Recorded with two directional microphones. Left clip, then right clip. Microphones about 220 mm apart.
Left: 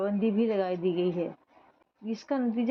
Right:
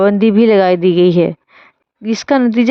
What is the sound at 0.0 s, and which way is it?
Speech, 50° right (ahead or behind).